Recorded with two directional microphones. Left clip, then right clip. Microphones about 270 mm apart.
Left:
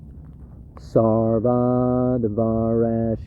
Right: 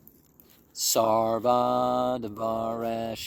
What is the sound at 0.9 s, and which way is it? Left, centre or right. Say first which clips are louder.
Mantra: left 5 dB; right.